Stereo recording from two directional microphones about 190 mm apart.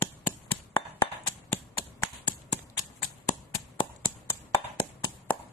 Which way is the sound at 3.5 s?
20° left (ahead or behind).